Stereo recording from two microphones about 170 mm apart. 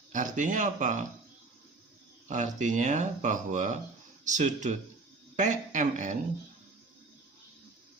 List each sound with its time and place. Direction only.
0.1 s speech: 50° right (ahead or behind)
2.2 s speech: 45° right (ahead or behind)